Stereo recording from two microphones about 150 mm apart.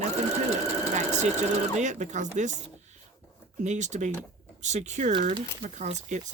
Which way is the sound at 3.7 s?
50° right (ahead or behind).